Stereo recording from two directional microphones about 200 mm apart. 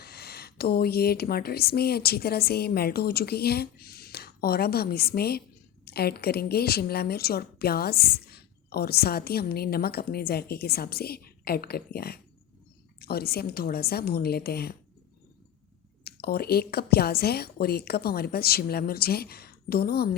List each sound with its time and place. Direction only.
0.0 s a woman's voice: 50° left (ahead or behind)
16.0 s a woman's voice: 50° left (ahead or behind)